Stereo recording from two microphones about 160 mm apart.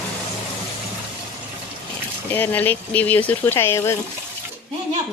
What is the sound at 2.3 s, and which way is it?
Speech, 10° left (ahead or behind).